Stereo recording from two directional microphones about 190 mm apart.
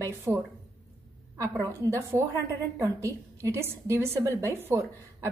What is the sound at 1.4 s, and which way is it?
A woman's voice, 15° right (ahead or behind).